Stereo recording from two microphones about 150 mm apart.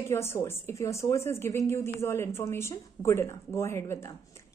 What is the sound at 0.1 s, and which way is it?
A woman's voice, 15° left (ahead or behind).